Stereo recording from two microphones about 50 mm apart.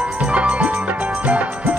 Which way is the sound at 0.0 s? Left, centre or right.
Right.